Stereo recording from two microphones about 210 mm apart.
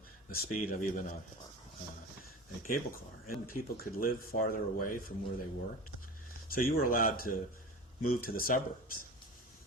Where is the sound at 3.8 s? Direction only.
45° left (ahead or behind).